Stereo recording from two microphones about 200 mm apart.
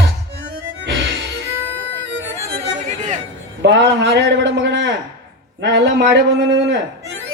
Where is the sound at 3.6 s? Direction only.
60° right (ahead or behind).